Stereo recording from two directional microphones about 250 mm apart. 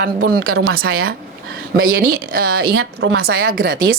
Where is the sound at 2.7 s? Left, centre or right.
Right.